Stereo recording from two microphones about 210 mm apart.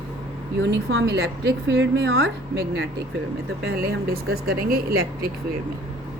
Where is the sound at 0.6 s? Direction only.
60° right (ahead or behind).